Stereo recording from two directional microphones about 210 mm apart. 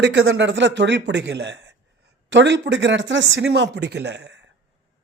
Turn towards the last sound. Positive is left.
turn(degrees=-60)  # may be behind; listen again after turning